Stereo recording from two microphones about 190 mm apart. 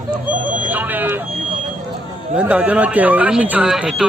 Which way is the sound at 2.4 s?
5° right (ahead or behind).